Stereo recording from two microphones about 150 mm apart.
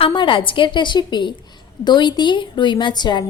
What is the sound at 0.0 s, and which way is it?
A woman's voice, 35° left (ahead or behind).